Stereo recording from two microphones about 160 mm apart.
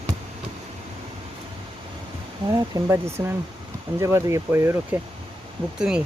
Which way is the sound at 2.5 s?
20° right (ahead or behind).